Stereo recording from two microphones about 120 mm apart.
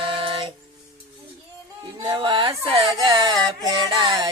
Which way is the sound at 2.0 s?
40° right (ahead or behind).